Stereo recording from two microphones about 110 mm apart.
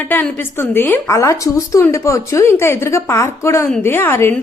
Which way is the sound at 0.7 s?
20° left (ahead or behind).